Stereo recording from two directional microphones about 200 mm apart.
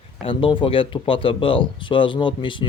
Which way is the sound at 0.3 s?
25° left (ahead or behind).